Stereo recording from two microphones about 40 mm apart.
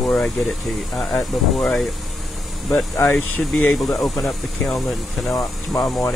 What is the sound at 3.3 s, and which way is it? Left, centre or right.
Speech, left.